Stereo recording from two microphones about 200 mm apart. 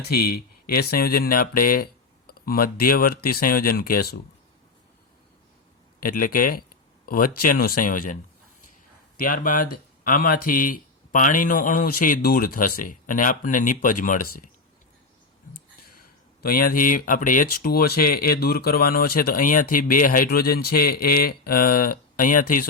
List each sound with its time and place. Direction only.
0.0 s speech: 50° left (ahead or behind)
6.0 s speech: 45° left (ahead or behind)
16.0 s speech: 45° left (ahead or behind)